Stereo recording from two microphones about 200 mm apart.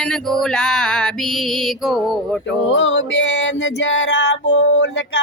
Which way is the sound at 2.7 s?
70° left (ahead or behind).